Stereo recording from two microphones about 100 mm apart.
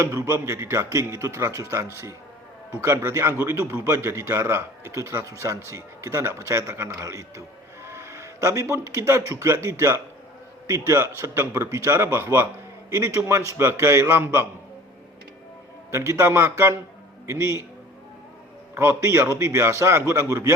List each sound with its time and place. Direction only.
0.0 s a man's voice: 35° right (ahead or behind)
15.9 s a man's voice: 30° right (ahead or behind)
18.7 s a man's voice: 25° right (ahead or behind)